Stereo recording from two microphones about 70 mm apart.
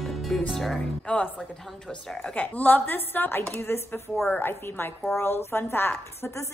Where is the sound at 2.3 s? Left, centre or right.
Left.